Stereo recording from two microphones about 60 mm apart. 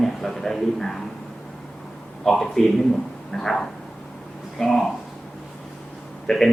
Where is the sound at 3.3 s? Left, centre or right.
Centre.